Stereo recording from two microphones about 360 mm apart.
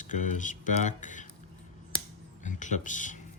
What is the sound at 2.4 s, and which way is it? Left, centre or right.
Speech, left.